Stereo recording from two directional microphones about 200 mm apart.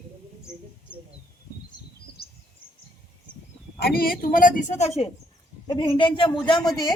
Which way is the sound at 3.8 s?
50° left (ahead or behind).